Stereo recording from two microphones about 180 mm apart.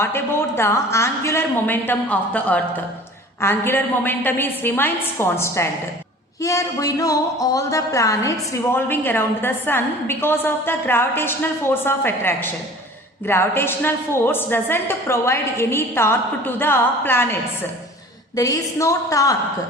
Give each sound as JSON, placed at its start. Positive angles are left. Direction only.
{"t": 0.0, "sound": "a woman's voice", "side_deg": 15}